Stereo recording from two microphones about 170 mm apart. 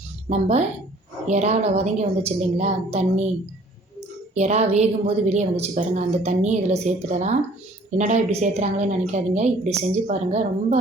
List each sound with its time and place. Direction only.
0.3 s a woman's voice: 40° right (ahead or behind)
4.4 s a woman's voice: 40° right (ahead or behind)